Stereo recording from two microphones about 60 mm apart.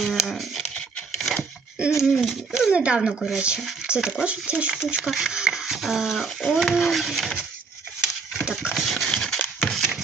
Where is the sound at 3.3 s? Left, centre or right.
Centre.